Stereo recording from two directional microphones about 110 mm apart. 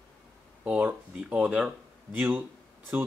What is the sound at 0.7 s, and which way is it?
Speech, 15° right (ahead or behind).